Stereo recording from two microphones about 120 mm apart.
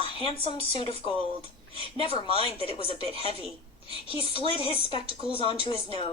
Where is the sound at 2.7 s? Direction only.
50° left (ahead or behind).